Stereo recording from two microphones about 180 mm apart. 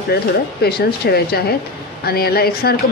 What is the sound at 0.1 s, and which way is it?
Speech, 60° left (ahead or behind).